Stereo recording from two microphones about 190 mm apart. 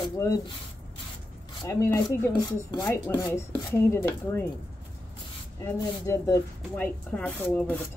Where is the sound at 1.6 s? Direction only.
15° left (ahead or behind).